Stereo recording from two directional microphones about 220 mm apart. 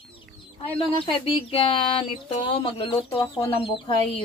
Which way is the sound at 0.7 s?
25° left (ahead or behind).